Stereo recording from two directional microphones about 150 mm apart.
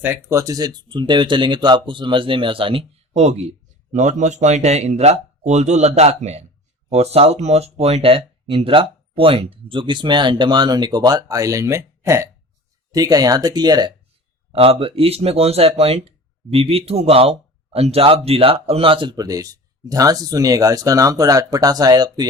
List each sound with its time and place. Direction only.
0.0 s speech: 15° right (ahead or behind)
14.5 s speech: 40° right (ahead or behind)